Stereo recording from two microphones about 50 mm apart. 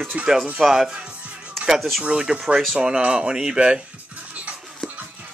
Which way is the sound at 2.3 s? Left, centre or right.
Right.